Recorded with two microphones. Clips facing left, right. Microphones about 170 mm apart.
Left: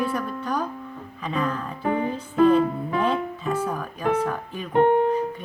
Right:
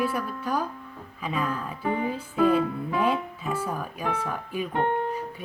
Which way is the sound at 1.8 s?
55° left (ahead or behind).